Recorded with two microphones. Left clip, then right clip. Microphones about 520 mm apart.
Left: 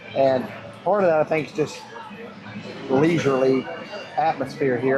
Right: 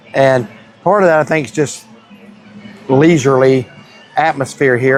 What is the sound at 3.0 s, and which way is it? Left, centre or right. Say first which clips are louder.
Speech: right 9 dB; right.